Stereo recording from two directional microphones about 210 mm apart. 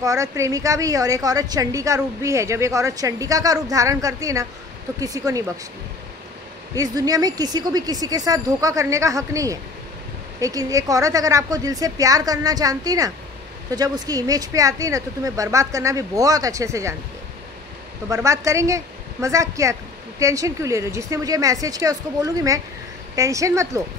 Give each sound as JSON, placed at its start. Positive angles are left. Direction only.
{"t": 0.0, "sound": "speech", "side_deg": -15}
{"t": 6.7, "sound": "speech", "side_deg": -15}
{"t": 18.1, "sound": "speech", "side_deg": -15}